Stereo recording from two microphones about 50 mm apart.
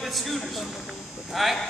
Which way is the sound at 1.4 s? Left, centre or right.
Centre.